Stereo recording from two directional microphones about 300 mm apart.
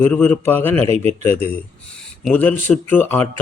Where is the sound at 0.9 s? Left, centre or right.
Right.